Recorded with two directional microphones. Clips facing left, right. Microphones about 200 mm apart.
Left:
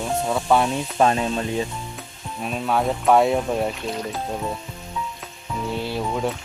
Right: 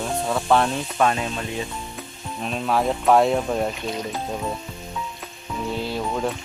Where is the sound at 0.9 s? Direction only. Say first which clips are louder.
Left 3 dB; 30° left (ahead or behind).